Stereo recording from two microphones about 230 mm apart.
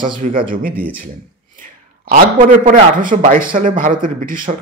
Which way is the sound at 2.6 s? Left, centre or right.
Right.